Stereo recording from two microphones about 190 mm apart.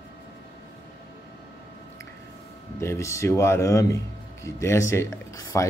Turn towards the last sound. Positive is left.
turn(degrees=20)  # may be behind; listen again after turning